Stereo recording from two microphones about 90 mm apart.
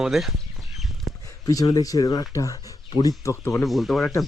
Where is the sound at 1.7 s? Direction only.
45° left (ahead or behind).